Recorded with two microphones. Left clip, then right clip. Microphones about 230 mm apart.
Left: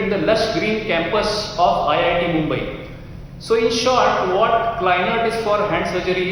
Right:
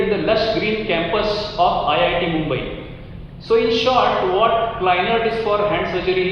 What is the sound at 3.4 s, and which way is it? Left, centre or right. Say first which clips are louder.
A man's voice: right 1 dB; left.